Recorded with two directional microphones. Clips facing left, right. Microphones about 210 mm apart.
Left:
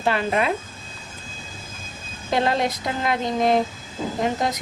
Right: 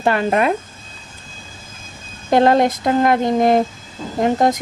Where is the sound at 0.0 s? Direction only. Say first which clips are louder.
Right 5 dB; 50° right (ahead or behind).